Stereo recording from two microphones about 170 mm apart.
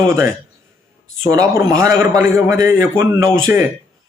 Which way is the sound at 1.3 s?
20° right (ahead or behind).